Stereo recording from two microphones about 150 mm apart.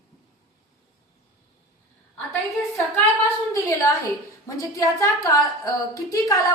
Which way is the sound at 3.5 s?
20° left (ahead or behind).